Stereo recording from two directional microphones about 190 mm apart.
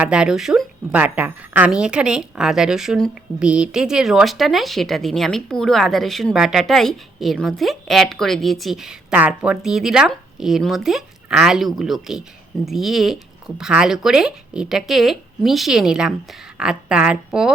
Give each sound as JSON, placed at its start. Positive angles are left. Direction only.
{"t": 0.0, "sound": "a woman's voice", "side_deg": -5}